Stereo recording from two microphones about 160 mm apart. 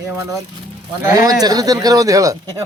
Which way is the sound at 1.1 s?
25° right (ahead or behind).